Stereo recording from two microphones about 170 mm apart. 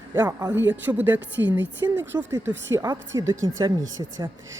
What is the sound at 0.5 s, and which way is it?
A woman's voice, 10° right (ahead or behind).